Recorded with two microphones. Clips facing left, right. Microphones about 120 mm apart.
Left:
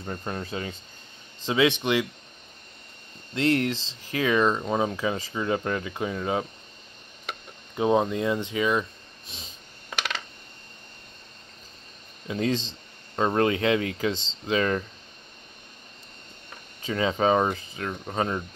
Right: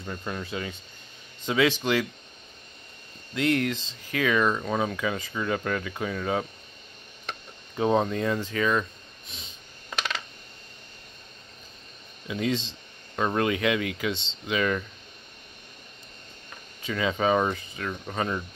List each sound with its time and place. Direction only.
0.0 s speech: 35° left (ahead or behind)
3.3 s speech: 30° left (ahead or behind)
12.3 s speech: 35° left (ahead or behind)
16.8 s speech: 35° left (ahead or behind)